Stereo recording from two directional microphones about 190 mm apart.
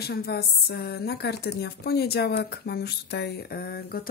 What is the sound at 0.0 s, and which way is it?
A woman's voice, 55° left (ahead or behind).